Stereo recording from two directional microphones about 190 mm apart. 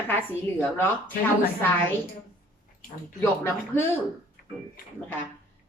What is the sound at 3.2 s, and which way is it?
Speech, 10° left (ahead or behind).